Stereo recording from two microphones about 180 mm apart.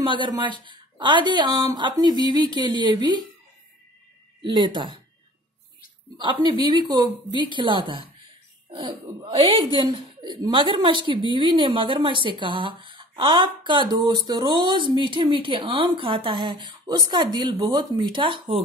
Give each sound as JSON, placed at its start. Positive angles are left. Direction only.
{"t": 0.0, "sound": "speech", "side_deg": -25}
{"t": 4.4, "sound": "speech", "side_deg": -25}
{"t": 6.1, "sound": "speech", "side_deg": -25}